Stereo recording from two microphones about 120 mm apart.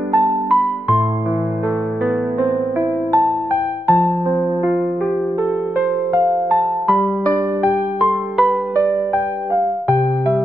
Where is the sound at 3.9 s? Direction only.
25° right (ahead or behind).